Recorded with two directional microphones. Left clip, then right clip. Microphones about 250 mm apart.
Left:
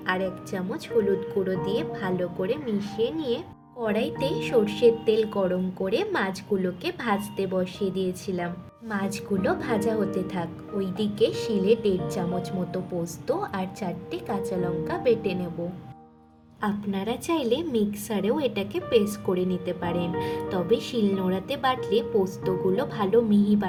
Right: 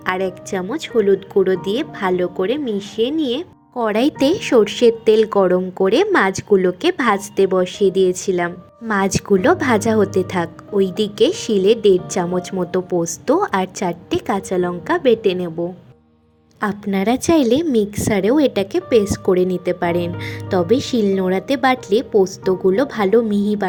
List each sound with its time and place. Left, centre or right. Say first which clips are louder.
0.0 s speech: right 7 dB; right
16.6 s a woman's voice: right 9 dB; right